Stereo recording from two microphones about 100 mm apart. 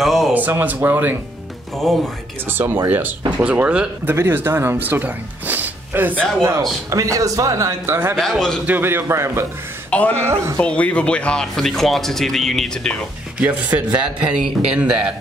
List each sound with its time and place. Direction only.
0.0 s a sound: centre (ahead or behind)
0.3 s a man's voice: 20° right (ahead or behind)
1.9 s speech: centre (ahead or behind)
2.5 s a man's voice: 25° right (ahead or behind)
4.1 s speech: 25° right (ahead or behind)
6.9 s a man's voice: 35° right (ahead or behind)
8.2 s speech: 5° left (ahead or behind)
8.6 s a man's voice: 20° right (ahead or behind)
9.8 s a sound: 15° left (ahead or behind)
10.1 s a man's voice: 25° right (ahead or behind)
10.6 s speech: 15° left (ahead or behind)
13.4 s speech: 15° right (ahead or behind)